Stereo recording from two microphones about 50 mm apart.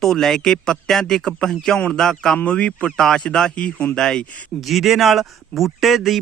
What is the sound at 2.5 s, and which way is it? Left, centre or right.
Speech, left.